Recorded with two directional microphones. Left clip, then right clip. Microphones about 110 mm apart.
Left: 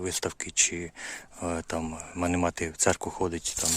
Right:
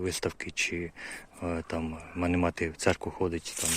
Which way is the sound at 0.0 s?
35° left (ahead or behind).